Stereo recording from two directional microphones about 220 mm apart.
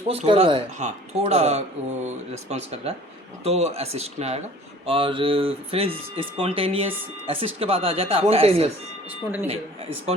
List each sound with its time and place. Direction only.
0.1 s speech: 30° right (ahead or behind)